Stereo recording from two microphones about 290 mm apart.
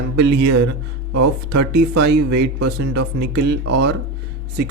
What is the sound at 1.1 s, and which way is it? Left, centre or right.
Speech, right.